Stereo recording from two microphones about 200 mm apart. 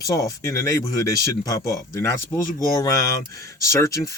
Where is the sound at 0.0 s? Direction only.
15° left (ahead or behind).